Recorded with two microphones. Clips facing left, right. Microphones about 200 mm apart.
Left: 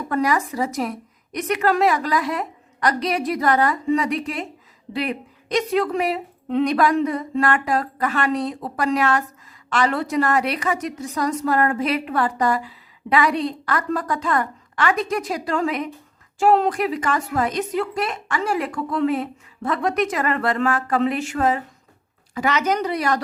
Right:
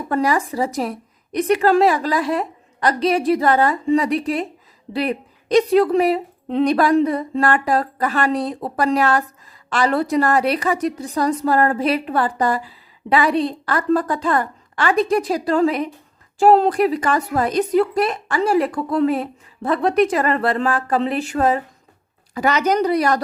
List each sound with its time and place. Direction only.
0.1 s a woman's voice: 30° right (ahead or behind)